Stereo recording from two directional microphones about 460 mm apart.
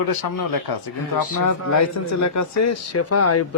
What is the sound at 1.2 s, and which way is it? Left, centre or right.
Speech, left.